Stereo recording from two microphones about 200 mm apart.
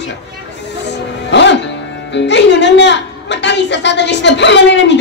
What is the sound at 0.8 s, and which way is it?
Music, 60° left (ahead or behind).